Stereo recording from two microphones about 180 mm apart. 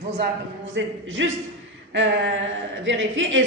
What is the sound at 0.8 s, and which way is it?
A woman's voice, 90° right.